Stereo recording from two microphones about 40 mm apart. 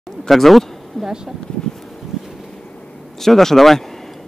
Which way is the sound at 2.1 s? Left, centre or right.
Centre.